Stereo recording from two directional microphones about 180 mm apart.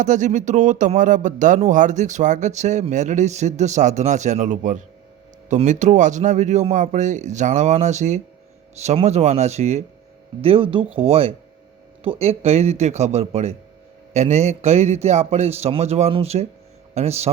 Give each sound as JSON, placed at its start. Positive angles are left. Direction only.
{"t": 0.0, "sound": "speech", "side_deg": -45}